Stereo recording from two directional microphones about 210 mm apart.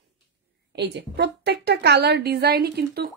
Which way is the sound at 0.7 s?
55° right (ahead or behind).